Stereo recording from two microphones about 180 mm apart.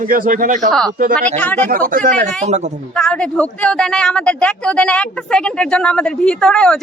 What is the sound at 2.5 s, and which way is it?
Speech, 40° right (ahead or behind).